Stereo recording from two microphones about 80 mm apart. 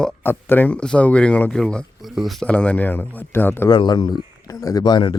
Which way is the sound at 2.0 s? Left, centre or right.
Centre.